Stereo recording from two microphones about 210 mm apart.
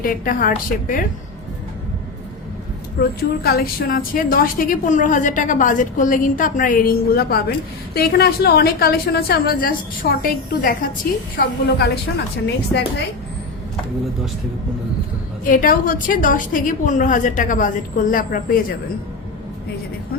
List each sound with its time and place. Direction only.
0.0 s a woman's voice: 40° left (ahead or behind)
3.0 s a woman's voice: 45° left (ahead or behind)
15.4 s a woman's voice: 40° left (ahead or behind)